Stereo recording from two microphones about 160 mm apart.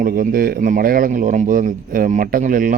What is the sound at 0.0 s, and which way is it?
Speech, 65° right (ahead or behind).